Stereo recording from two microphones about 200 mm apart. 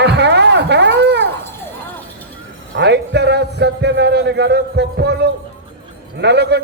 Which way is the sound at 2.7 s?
60° right (ahead or behind).